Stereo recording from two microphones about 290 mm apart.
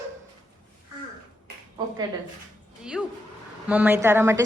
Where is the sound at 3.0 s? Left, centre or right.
Centre.